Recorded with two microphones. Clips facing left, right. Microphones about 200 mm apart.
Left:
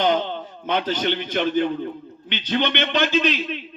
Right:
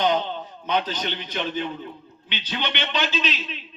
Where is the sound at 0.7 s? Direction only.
50° left (ahead or behind).